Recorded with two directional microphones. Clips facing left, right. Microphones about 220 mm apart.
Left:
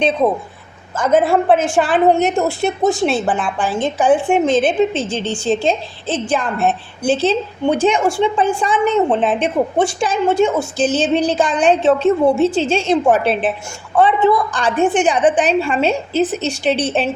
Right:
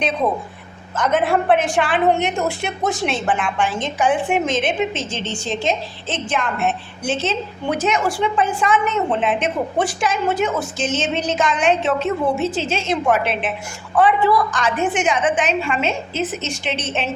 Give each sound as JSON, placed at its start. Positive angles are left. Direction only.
{"t": 1.0, "sound": "a woman's voice", "side_deg": 30}
{"t": 2.8, "sound": "speech", "side_deg": 0}
{"t": 3.2, "sound": "a woman's voice", "side_deg": 35}
{"t": 13.9, "sound": "a woman's voice", "side_deg": 25}